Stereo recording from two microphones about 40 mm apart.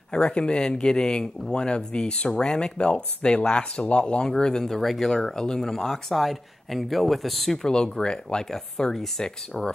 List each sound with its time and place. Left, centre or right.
0.1 s speech: left; by 7.6 s centre
7.6 s speech: centre